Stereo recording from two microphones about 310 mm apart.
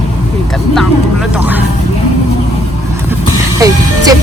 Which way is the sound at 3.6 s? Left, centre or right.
Centre.